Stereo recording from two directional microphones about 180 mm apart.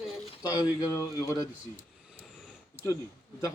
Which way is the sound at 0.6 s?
20° left (ahead or behind).